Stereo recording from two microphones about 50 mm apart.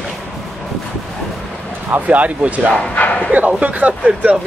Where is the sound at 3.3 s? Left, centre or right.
Right.